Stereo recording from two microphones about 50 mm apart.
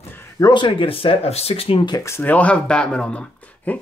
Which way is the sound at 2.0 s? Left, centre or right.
Left.